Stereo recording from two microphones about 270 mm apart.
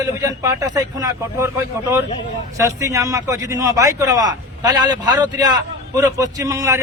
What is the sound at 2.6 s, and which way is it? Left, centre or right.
A man's voice, centre.